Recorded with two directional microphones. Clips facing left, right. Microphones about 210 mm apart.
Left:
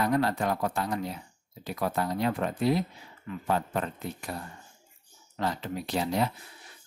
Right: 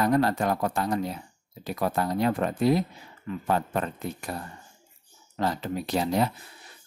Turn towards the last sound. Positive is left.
turn(degrees=-40)  # may be behind; listen again after turning